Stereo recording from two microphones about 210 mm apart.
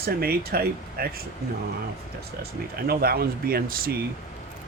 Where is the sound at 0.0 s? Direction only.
45° right (ahead or behind).